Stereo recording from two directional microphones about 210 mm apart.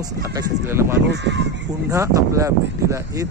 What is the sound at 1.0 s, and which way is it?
Speech, 55° right (ahead or behind).